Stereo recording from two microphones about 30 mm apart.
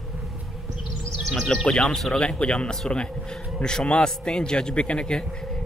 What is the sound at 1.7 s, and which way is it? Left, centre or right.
Speech, centre.